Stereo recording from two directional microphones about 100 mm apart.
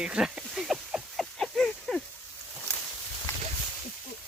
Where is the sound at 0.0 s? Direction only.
10° right (ahead or behind).